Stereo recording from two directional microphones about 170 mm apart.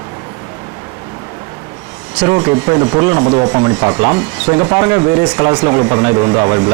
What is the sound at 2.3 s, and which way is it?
Speech, 20° right (ahead or behind).